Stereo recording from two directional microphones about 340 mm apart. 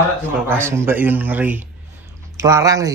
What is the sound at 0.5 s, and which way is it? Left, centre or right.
A man's voice, centre.